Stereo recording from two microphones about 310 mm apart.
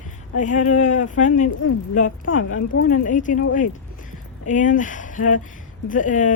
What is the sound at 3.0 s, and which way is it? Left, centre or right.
Speech, left.